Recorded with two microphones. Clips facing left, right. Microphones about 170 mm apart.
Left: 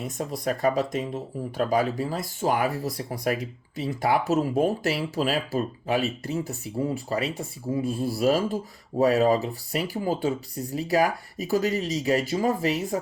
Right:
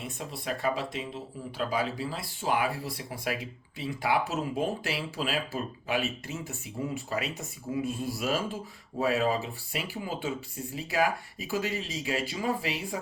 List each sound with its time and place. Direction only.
0.0 s speech: 40° left (ahead or behind)